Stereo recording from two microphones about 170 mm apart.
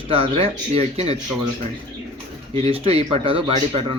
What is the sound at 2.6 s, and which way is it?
Speech, 35° right (ahead or behind).